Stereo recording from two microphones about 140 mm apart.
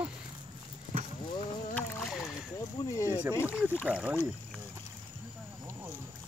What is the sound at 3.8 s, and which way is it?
Speech, 10° right (ahead or behind).